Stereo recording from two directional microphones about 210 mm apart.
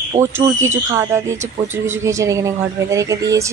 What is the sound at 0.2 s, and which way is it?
Speech, 15° right (ahead or behind).